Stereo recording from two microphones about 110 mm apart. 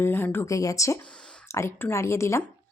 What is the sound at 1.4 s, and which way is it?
Speech, 25° left (ahead or behind).